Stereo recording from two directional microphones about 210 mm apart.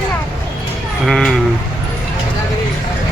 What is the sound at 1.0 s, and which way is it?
Speech, centre (ahead or behind).